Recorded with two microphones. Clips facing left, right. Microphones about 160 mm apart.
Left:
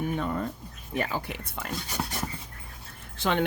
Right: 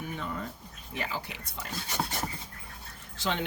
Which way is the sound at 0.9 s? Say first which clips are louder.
Left 6 dB; 50° left (ahead or behind).